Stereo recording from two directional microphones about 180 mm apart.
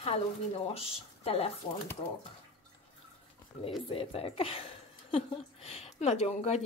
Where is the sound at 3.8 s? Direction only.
30° left (ahead or behind).